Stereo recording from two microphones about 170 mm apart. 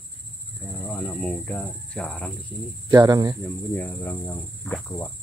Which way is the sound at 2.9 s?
20° right (ahead or behind).